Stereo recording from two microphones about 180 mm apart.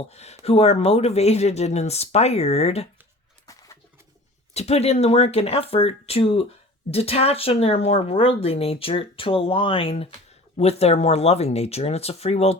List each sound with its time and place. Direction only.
0.1 s speech: 35° left (ahead or behind)
3.4 s a sound: 20° left (ahead or behind)
4.5 s speech: 35° left (ahead or behind)